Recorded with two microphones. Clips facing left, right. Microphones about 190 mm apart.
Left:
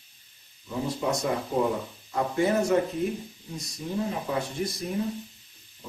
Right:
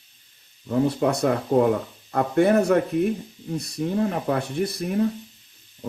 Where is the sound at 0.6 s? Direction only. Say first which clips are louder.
Right 8 dB; 60° right (ahead or behind).